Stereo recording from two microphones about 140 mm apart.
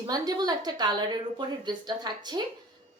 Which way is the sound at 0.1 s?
30° right (ahead or behind).